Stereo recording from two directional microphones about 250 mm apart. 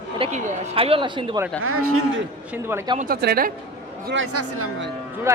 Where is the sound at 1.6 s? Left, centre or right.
Right.